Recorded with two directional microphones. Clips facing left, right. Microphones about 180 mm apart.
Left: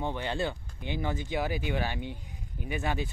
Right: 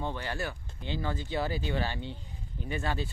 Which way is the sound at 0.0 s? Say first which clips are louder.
Left 3 dB; 20° left (ahead or behind).